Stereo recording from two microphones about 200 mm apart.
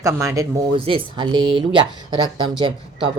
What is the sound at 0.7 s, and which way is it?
Speech, 25° right (ahead or behind).